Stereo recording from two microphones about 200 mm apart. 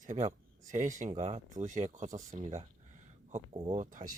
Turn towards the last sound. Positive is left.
turn(degrees=-40)  # may be behind; listen again after turning